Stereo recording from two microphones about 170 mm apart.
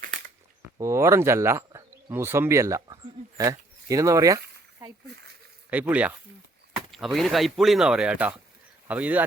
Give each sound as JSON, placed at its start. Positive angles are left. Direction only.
{"t": 0.8, "sound": "speech", "side_deg": -15}
{"t": 5.7, "sound": "speech", "side_deg": -10}